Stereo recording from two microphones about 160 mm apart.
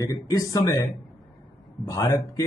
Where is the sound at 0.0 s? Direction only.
20° left (ahead or behind).